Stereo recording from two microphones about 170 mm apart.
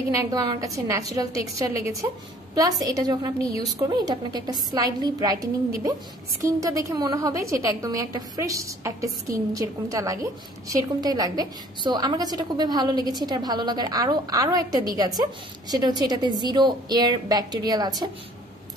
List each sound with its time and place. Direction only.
0.1 s a woman's voice: 20° right (ahead or behind)